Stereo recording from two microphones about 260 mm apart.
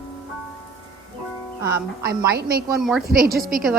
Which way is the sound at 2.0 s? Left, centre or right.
Right.